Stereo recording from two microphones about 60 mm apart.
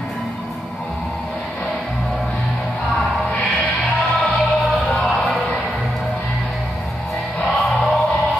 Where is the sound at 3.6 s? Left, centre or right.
Centre.